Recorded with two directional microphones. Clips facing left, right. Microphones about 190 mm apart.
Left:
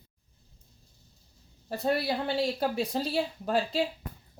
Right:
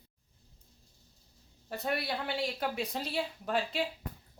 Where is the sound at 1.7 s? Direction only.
30° left (ahead or behind).